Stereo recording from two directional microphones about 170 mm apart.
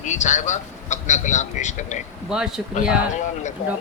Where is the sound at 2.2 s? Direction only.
5° right (ahead or behind).